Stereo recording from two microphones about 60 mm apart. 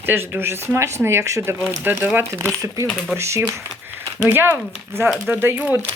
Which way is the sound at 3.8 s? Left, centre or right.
Right.